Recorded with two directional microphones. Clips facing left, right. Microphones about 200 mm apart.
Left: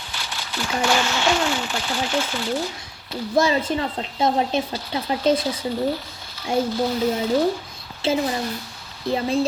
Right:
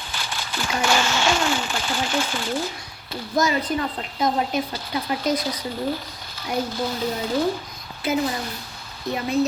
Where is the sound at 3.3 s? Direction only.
25° left (ahead or behind).